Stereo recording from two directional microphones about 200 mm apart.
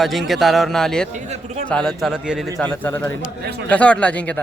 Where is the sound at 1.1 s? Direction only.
35° right (ahead or behind).